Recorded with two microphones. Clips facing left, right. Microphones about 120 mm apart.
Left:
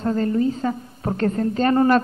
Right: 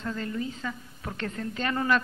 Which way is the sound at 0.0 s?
40° left (ahead or behind).